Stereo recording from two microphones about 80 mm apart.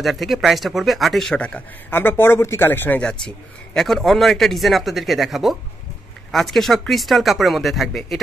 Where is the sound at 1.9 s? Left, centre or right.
Left.